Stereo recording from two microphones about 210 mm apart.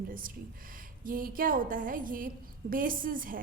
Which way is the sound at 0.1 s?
40° right (ahead or behind).